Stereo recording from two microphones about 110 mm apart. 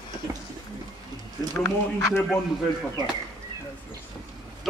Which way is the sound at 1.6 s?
25° left (ahead or behind).